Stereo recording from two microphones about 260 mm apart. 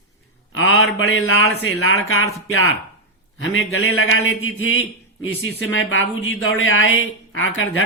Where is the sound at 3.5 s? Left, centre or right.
Left.